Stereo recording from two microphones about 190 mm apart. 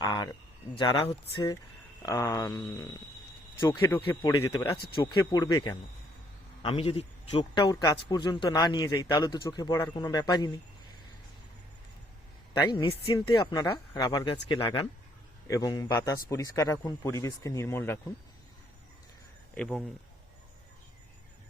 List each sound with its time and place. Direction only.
0.0 s a sound: 20° left (ahead or behind)
0.8 s a man's voice: 25° left (ahead or behind)
12.5 s a man's voice: 25° left (ahead or behind)
19.5 s speech: centre (ahead or behind)